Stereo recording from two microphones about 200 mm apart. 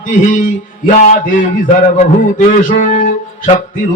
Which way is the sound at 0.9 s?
40° left (ahead or behind).